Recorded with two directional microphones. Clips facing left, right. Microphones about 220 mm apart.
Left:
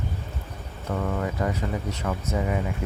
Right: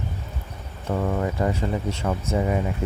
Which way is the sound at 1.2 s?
30° right (ahead or behind).